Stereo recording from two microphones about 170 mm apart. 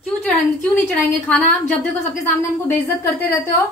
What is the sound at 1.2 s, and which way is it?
Speech, 5° left (ahead or behind).